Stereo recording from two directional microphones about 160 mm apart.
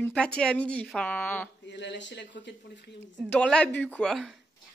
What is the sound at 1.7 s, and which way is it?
Speech, 90° left.